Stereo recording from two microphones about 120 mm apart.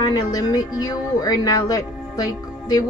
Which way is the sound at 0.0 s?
35° left (ahead or behind).